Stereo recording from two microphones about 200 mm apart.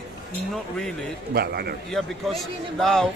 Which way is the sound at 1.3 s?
50° right (ahead or behind).